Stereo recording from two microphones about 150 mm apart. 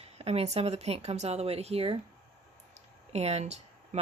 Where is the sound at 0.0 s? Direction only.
40° right (ahead or behind).